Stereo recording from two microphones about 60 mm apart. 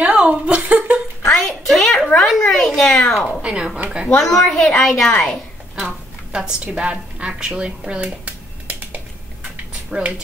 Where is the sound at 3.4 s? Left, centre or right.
Centre.